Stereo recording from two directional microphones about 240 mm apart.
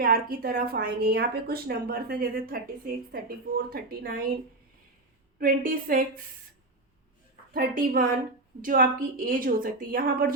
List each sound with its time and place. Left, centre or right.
0.0 s a woman's voice: right
5.4 s a woman's voice: right
7.5 s a woman's voice: right